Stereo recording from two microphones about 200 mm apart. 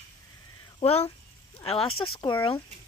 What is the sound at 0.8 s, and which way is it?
Speech, 30° left (ahead or behind).